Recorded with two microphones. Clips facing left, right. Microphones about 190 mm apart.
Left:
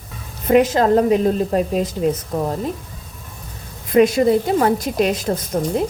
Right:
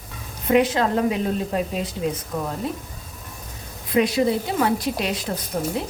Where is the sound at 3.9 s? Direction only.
50° left (ahead or behind).